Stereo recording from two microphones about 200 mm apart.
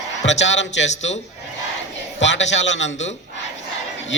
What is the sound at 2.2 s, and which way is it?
Speech, 65° left (ahead or behind).